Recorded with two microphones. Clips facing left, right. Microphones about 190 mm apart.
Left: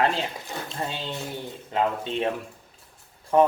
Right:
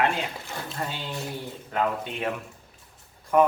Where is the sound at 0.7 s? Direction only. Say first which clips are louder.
Left 1 dB; 25° left (ahead or behind).